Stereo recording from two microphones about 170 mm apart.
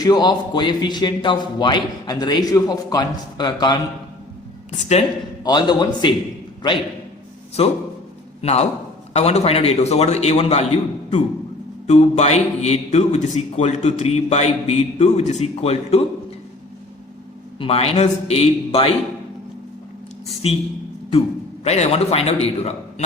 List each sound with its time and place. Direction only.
0.0 s a man's voice: 25° left (ahead or behind)
4.8 s a man's voice: 40° left (ahead or behind)
5.4 s a man's voice: 25° left (ahead or behind)
17.6 s a man's voice: 35° left (ahead or behind)
20.2 s a man's voice: 35° left (ahead or behind)
21.6 s a man's voice: 40° left (ahead or behind)